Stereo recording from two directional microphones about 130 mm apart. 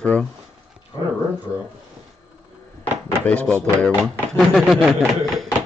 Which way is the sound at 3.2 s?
10° left (ahead or behind).